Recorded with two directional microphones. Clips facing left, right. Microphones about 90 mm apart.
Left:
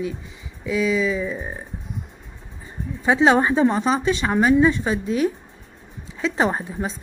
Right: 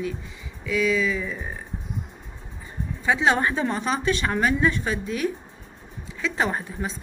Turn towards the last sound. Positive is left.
turn(degrees=25)  # may be behind; listen again after turning